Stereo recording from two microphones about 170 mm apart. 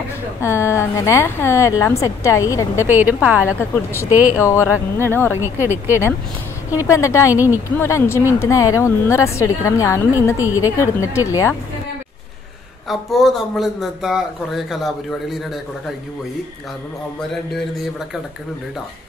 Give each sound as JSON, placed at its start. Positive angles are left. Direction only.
{"t": 0.4, "sound": "a woman's voice", "side_deg": 15}
{"t": 2.9, "sound": "a woman's voice", "side_deg": -10}
{"t": 4.4, "sound": "a woman's voice", "side_deg": 15}
{"t": 5.4, "sound": "a woman's voice", "side_deg": -15}
{"t": 6.7, "sound": "a woman's voice", "side_deg": 20}
{"t": 12.8, "sound": "speech", "side_deg": 0}